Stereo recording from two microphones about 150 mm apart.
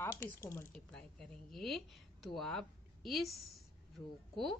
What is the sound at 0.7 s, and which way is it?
A woman's voice, 5° left (ahead or behind).